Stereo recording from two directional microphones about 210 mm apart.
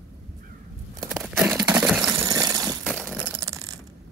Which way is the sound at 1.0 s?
5° right (ahead or behind).